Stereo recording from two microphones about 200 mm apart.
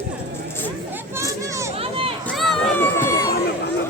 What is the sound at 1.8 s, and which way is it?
Run, 30° right (ahead or behind).